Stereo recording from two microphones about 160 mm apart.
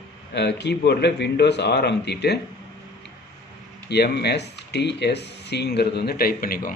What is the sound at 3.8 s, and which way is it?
A man's voice, 90° left.